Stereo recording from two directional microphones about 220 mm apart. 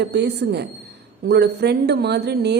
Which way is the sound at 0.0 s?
50° right (ahead or behind).